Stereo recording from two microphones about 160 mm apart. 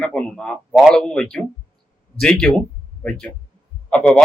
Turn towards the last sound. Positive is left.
turn(degrees=5)  # may be behind; listen again after turning